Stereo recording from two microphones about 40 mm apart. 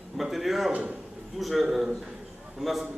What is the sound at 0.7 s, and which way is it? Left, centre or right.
Speech, right.